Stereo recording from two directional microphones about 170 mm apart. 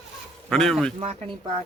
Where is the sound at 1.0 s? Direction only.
35° right (ahead or behind).